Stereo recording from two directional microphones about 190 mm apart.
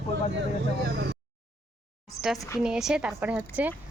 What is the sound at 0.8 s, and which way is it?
Speech, 65° right (ahead or behind).